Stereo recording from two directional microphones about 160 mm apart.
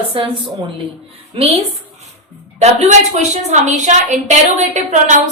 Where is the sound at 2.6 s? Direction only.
45° right (ahead or behind).